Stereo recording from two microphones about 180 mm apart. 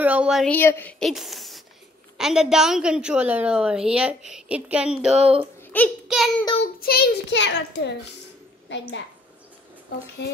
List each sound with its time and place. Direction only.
0.0 s speech: 5° right (ahead or behind)
0.5 s a woman's voice: 10° left (ahead or behind); by 5.1 s 5° right (ahead or behind)
5.1 s speech: 35° right (ahead or behind)
5.6 s child singing: 10° left (ahead or behind)
6.0 s child singing: centre (ahead or behind)
6.4 s child singing: 30° left (ahead or behind)
6.8 s a child's voice: 60° left (ahead or behind); by 8.8 s 80° left
10.2 s a child's voice: 70° left (ahead or behind)